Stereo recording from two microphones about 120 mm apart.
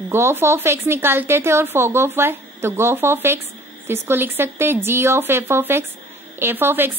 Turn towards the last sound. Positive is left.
turn(degrees=-15)  # may be behind; listen again after turning